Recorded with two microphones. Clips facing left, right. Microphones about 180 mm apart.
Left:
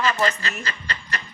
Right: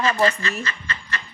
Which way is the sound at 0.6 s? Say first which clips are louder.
Even; 35° left (ahead or behind).